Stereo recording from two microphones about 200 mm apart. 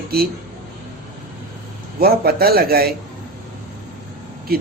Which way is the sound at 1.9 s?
50° right (ahead or behind).